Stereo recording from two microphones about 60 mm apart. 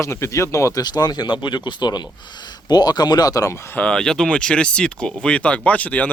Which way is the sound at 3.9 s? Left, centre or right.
Centre.